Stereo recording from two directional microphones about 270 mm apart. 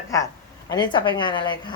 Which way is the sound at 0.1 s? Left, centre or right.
Centre.